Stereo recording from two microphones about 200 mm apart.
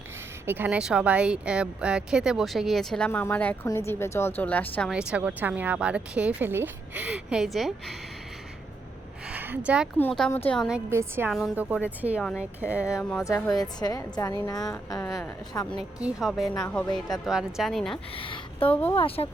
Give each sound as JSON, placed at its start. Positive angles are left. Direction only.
{"t": 0.4, "sound": "a woman's voice", "side_deg": -10}
{"t": 4.9, "sound": "speech", "side_deg": -5}
{"t": 9.2, "sound": "a sound", "side_deg": -10}
{"t": 10.0, "sound": "speech", "side_deg": 5}
{"t": 11.3, "sound": "speech", "side_deg": 0}
{"t": 12.2, "sound": "speech", "side_deg": 5}
{"t": 12.5, "sound": "speech", "side_deg": -10}
{"t": 12.9, "sound": "a woman's voice", "side_deg": 10}
{"t": 15.8, "sound": "speech", "side_deg": -5}
{"t": 16.5, "sound": "a woman's voice", "side_deg": 10}
{"t": 17.2, "sound": "speech", "side_deg": 0}
{"t": 17.9, "sound": "a woman's voice", "side_deg": 25}
{"t": 18.7, "sound": "a woman's voice", "side_deg": 10}
{"t": 18.9, "sound": "a woman's voice", "side_deg": 30}